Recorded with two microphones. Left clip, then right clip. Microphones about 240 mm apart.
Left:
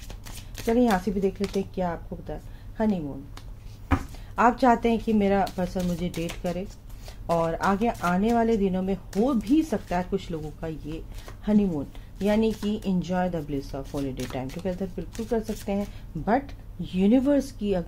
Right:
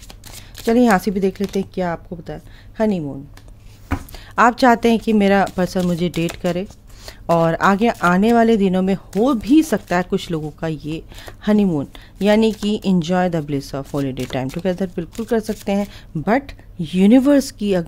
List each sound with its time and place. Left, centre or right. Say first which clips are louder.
0.7 s speech: right 8 dB; right
4.4 s speech: right 7 dB; right